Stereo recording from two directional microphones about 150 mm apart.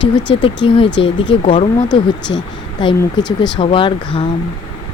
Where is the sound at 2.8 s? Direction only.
30° left (ahead or behind).